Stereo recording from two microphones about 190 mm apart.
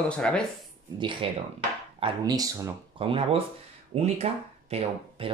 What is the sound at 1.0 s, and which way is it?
Speech, 25° right (ahead or behind).